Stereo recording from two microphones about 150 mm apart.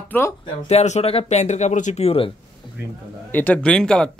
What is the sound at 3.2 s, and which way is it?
Speech, 10° left (ahead or behind).